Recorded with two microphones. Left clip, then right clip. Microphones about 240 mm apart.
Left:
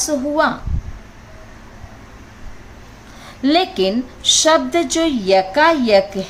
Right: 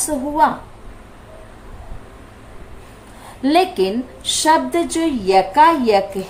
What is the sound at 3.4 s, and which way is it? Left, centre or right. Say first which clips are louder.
A woman's voice: even; left.